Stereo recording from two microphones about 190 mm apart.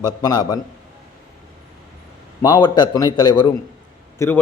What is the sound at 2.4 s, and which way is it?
A man's voice, 20° left (ahead or behind).